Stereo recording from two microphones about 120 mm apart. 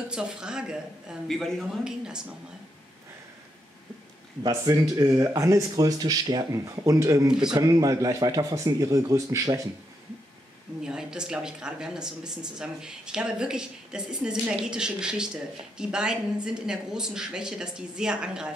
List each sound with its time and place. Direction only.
0.1 s speech: 5° right (ahead or behind)
4.5 s speech: 25° right (ahead or behind)
7.2 s speech: 5° right (ahead or behind)
7.5 s speech: 30° right (ahead or behind)
10.8 s speech: 5° right (ahead or behind)